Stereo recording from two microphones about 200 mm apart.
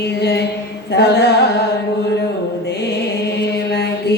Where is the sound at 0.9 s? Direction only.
55° left (ahead or behind).